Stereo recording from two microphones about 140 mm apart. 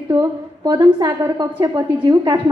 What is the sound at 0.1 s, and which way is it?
A woman's voice, 30° right (ahead or behind).